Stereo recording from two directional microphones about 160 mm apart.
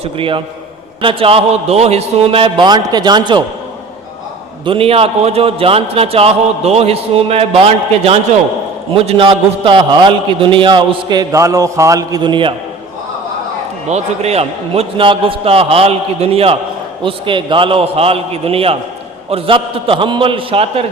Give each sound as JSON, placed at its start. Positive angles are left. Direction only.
{"t": 0.0, "sound": "a man's voice", "side_deg": -35}
{"t": 4.6, "sound": "a man's voice", "side_deg": -35}
{"t": 13.8, "sound": "a man's voice", "side_deg": -45}